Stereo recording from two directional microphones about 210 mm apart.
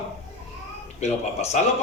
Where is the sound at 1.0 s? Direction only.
30° left (ahead or behind).